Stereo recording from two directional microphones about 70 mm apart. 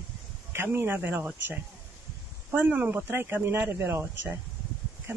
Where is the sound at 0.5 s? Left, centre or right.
Right.